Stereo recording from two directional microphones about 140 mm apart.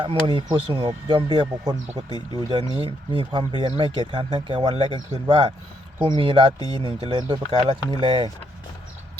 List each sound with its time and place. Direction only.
0.0 s speech: 35° right (ahead or behind)